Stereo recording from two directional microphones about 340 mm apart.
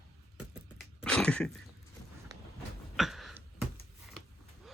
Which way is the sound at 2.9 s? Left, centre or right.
Centre.